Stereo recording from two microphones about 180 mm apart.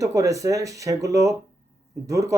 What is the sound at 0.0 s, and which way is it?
Speech, 20° right (ahead or behind).